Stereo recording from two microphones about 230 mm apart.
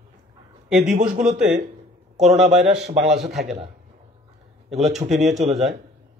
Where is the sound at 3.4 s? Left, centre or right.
Right.